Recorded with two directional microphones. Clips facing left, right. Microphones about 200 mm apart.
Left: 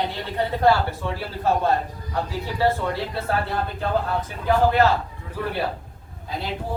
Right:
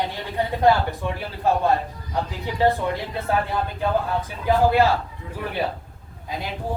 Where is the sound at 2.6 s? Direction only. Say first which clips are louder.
Right 2 dB; 15° right (ahead or behind).